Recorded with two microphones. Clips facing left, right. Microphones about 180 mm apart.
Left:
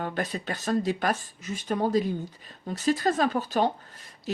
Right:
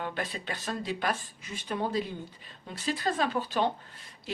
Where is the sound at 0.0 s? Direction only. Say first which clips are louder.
Left 4 dB; 45° left (ahead or behind).